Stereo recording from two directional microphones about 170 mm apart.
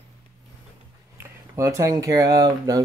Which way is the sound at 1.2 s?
20° right (ahead or behind).